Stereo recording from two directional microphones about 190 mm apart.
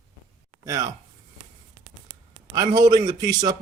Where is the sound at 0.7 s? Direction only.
20° right (ahead or behind).